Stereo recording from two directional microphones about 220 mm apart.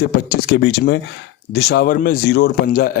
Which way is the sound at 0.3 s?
45° left (ahead or behind).